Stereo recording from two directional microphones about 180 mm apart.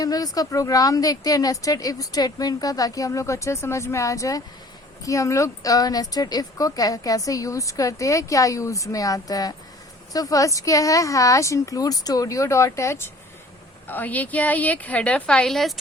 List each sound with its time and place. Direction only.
0.0 s a woman's voice: 20° left (ahead or behind); by 15.8 s centre (ahead or behind)